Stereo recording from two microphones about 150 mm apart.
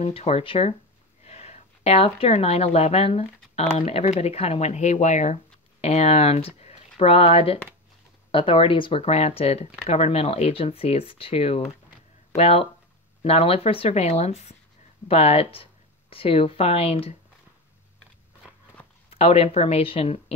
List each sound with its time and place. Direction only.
0.0 s speech: 45° left (ahead or behind)
19.0 s speech: 40° left (ahead or behind)